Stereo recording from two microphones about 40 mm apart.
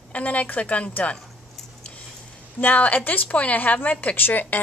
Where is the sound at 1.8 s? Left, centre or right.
Left.